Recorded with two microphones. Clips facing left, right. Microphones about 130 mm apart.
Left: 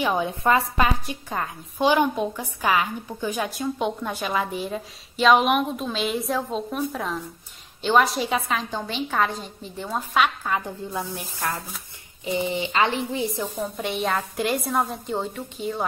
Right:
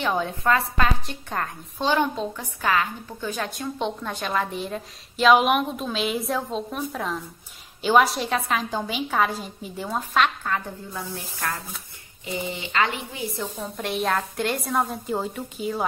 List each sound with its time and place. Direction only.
0.0 s a woman's voice: 10° left (ahead or behind); by 13.3 s 25° left (ahead or behind)
13.4 s a woman's voice: centre (ahead or behind)